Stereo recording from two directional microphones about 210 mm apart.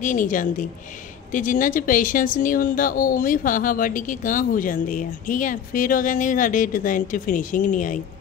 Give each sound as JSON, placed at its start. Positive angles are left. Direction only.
{"t": 0.0, "sound": "speech", "side_deg": 40}